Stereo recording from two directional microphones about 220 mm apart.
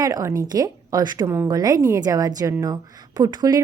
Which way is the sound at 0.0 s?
15° right (ahead or behind).